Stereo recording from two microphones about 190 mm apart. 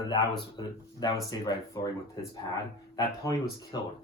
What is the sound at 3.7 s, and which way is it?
Speech, 20° left (ahead or behind).